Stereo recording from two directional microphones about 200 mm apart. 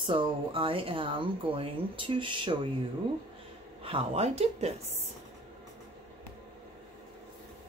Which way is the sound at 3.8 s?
30° right (ahead or behind).